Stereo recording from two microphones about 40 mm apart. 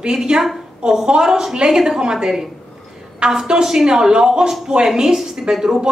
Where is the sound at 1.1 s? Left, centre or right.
Centre.